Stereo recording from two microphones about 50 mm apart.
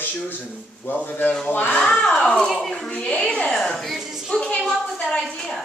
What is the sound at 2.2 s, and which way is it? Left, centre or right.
Speech, centre.